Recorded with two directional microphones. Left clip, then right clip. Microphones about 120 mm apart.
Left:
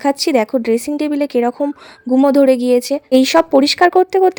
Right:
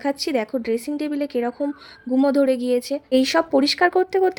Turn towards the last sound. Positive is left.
turn(degrees=25)  # may be behind; listen again after turning